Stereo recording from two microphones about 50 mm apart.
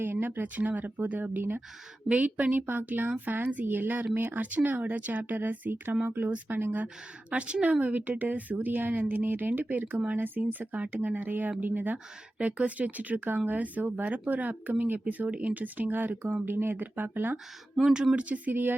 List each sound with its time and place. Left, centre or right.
0.0 s speech: right
2.0 s speech: right
6.8 s speech: right
12.4 s speech: right
17.3 s speech: centre
18.1 s speech: right